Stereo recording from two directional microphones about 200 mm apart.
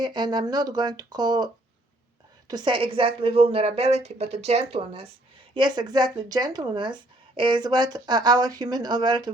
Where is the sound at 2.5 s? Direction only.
20° right (ahead or behind).